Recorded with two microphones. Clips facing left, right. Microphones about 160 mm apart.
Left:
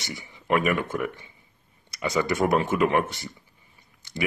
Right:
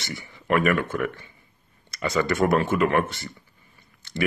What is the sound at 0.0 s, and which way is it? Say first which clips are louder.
Speech: right 2 dB; 15° left (ahead or behind).